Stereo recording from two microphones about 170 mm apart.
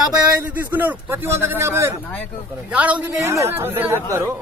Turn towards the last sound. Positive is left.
turn(degrees=-15)  # may be behind; listen again after turning